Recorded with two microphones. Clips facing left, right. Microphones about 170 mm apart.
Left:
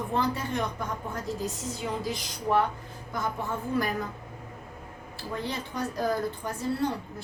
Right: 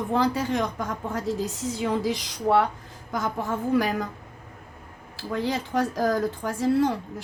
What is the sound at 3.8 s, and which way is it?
Speech, 90° right.